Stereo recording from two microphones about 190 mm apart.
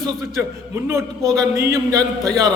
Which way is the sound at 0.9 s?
15° right (ahead or behind).